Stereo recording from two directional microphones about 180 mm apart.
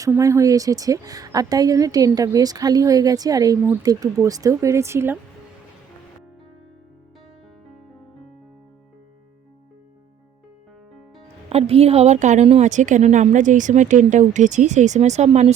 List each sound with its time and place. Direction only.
0.0 s a woman's voice: 15° right (ahead or behind)
11.4 s a woman's voice: 30° right (ahead or behind)